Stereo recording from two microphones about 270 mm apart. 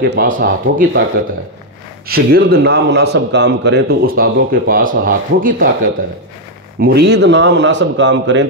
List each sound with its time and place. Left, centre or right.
0.0 s a man's voice: right
2.0 s a man's voice: right
6.8 s a man's voice: right